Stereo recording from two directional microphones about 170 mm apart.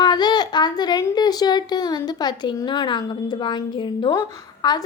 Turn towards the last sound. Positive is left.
turn(degrees=25)  # may be behind; listen again after turning